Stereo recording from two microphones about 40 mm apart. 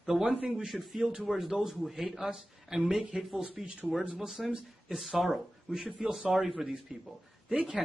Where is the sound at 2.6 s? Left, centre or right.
Centre.